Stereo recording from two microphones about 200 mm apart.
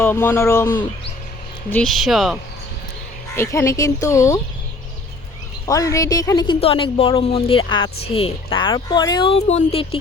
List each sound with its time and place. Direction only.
0.0 s speech: 10° left (ahead or behind)
1.7 s speech: centre (ahead or behind)
3.3 s speech: 15° left (ahead or behind)
5.6 s a woman's voice: 15° left (ahead or behind)